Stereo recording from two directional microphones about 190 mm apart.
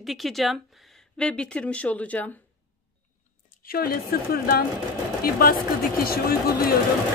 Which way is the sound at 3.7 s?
50° left (ahead or behind).